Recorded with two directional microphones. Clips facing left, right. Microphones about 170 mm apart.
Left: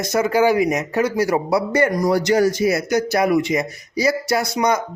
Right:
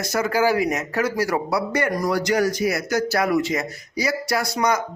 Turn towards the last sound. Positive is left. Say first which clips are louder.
# left 3 dB
turn(degrees=20)  # may be behind; listen again after turning